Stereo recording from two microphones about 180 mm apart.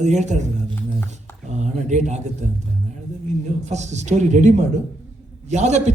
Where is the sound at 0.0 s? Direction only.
40° right (ahead or behind).